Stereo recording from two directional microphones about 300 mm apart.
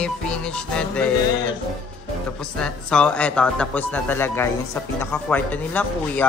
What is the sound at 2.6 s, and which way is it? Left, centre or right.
Speech, centre.